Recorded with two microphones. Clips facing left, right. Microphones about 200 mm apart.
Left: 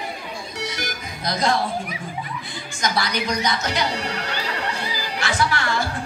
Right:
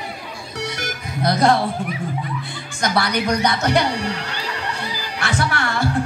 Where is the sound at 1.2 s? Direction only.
60° right (ahead or behind).